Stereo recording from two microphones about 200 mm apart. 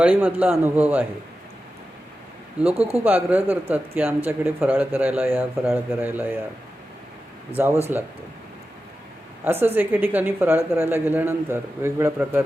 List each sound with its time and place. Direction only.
0.0 s speech: 10° right (ahead or behind)
2.6 s speech: 30° right (ahead or behind)
3.2 s speech: 10° right (ahead or behind)
7.5 s speech: 15° right (ahead or behind)
9.4 s speech: 10° right (ahead or behind)